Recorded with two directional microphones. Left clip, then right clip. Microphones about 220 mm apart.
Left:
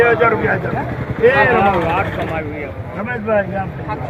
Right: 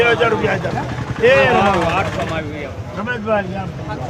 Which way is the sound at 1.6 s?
60° right (ahead or behind).